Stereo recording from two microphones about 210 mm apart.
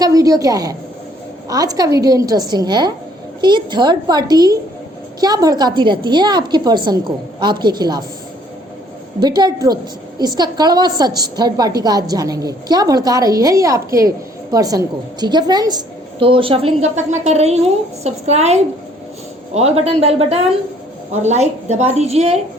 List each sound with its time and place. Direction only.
0.0 s a woman's voice: 15° right (ahead or behind)
9.2 s a woman's voice: 20° right (ahead or behind)